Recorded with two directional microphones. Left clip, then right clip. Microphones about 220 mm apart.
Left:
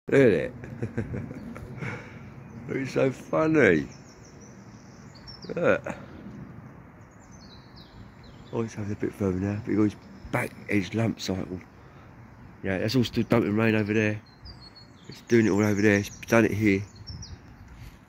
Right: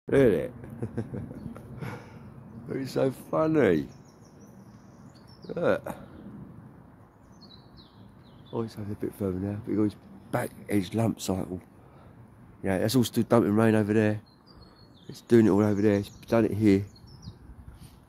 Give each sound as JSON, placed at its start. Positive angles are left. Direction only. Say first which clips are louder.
{"t": 0.0, "sound": "speech", "louder": "left 2 dB", "side_deg": -5}
{"t": 5.5, "sound": "speech", "louder": "left 2 dB", "side_deg": -5}
{"t": 8.5, "sound": "speech", "louder": "left 2 dB", "side_deg": 0}
{"t": 10.3, "sound": "speech", "louder": "left 1 dB", "side_deg": -10}
{"t": 12.6, "sound": "speech", "louder": "right 1 dB", "side_deg": -25}
{"t": 15.2, "sound": "speech", "louder": "right 1 dB", "side_deg": -25}
{"t": 15.7, "sound": "speech", "louder": "left 2 dB", "side_deg": -5}
{"t": 16.6, "sound": "a sound", "louder": "right 1 dB", "side_deg": -30}